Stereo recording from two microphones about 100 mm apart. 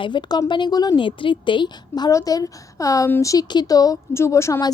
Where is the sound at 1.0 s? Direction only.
55° left (ahead or behind).